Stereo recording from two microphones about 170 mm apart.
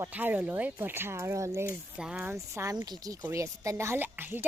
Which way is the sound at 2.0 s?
5° right (ahead or behind).